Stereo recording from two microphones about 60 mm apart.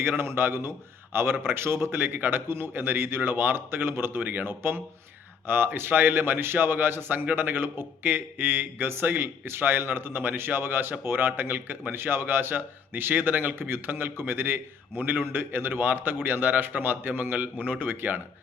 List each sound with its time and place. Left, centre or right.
0.0 s a man's voice: right